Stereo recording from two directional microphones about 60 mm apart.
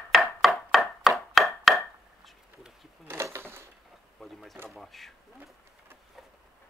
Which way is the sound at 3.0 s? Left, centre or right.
Right.